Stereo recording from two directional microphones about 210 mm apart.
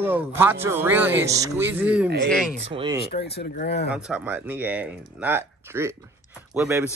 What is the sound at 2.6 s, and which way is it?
Speech, 25° right (ahead or behind).